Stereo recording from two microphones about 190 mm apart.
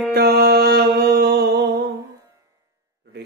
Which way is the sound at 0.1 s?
60° right (ahead or behind).